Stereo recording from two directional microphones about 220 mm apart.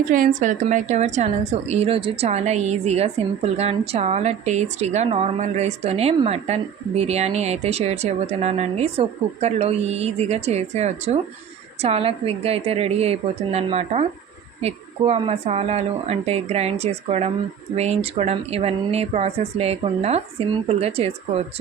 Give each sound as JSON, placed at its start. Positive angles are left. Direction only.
{"t": 0.1, "sound": "a woman's voice", "side_deg": -35}